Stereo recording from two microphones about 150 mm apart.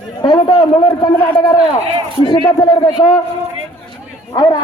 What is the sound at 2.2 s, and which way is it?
A man's voice, 30° left (ahead or behind).